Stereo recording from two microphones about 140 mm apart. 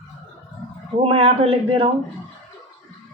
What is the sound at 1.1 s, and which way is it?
Speech, 40° right (ahead or behind).